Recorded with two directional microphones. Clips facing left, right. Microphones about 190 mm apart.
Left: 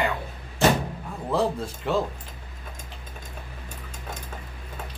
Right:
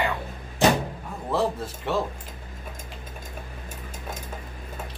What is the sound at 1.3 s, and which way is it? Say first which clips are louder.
Speech: left 1 dB; centre (ahead or behind).